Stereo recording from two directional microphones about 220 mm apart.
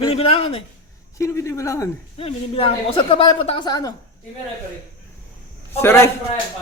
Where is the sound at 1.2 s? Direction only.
15° left (ahead or behind).